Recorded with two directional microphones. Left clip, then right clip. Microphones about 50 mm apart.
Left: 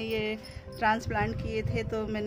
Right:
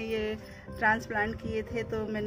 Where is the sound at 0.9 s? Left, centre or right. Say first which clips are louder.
Even; centre.